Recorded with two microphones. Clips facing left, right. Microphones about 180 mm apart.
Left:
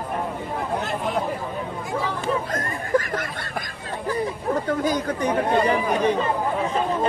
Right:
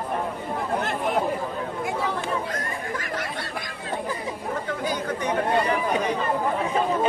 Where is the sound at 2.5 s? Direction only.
45° left (ahead or behind).